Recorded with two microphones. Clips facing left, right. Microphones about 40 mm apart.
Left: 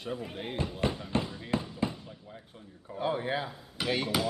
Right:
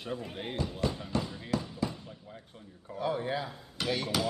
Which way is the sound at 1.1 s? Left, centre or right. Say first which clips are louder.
Left 2 dB; left.